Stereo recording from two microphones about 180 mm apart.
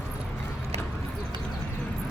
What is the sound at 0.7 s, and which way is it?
Clip-clop, 35° right (ahead or behind).